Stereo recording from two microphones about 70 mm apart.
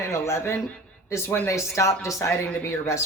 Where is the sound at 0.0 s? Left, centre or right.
Left.